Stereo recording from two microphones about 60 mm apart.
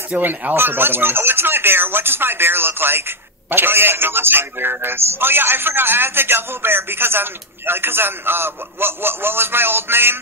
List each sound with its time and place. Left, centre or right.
0.1 s a man's voice: right